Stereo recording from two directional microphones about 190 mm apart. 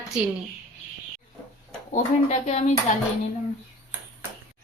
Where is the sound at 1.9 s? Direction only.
35° left (ahead or behind).